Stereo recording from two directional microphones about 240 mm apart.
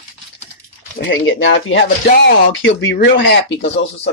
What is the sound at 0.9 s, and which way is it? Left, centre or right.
Speech, left.